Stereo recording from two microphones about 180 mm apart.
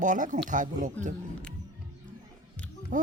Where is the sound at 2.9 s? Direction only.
45° right (ahead or behind).